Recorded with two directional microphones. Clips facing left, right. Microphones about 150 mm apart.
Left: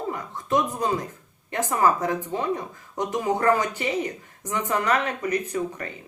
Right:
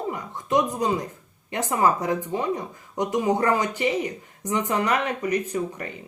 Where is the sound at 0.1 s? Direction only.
15° right (ahead or behind).